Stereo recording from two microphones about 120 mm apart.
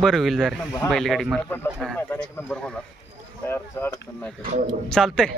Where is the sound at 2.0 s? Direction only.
15° left (ahead or behind).